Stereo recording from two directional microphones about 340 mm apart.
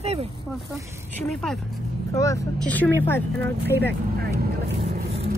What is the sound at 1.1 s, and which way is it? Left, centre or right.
Speech, centre.